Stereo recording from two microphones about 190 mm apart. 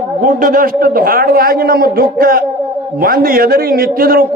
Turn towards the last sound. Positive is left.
turn(degrees=-50)  # may be behind; listen again after turning